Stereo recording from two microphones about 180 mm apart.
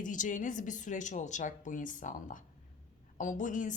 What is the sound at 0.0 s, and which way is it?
A woman's voice, 45° left (ahead or behind).